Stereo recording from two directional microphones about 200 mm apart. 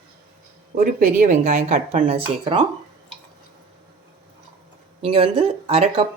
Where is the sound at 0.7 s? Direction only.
40° right (ahead or behind); by 2.7 s 25° right (ahead or behind).